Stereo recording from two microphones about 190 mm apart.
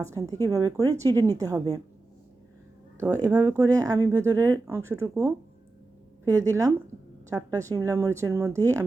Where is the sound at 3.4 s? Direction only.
15° right (ahead or behind).